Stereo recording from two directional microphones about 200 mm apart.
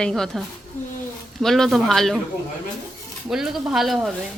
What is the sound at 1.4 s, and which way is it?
Speech, centre (ahead or behind).